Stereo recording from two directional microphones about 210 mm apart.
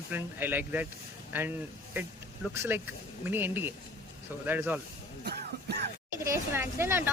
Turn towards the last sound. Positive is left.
turn(degrees=-10)  # may be behind; listen again after turning